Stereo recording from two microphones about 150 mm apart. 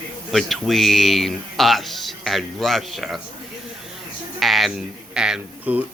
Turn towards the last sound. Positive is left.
turn(degrees=-5)  # may be behind; listen again after turning